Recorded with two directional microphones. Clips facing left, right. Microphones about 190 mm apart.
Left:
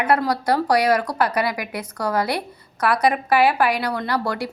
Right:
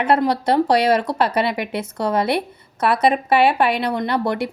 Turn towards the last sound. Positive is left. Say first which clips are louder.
# right 3 dB
turn(degrees=-20)  # may be behind; listen again after turning